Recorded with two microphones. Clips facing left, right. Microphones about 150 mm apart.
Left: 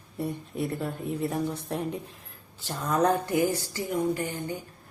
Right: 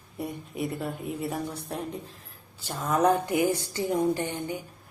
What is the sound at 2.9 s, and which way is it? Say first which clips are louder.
Speech: right 1 dB; 15° right (ahead or behind).